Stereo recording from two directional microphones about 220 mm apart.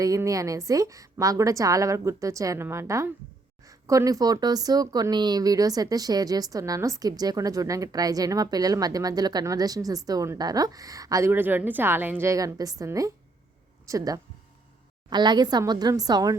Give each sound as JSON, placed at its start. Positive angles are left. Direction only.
{"t": 0.0, "sound": "a woman's voice", "side_deg": -15}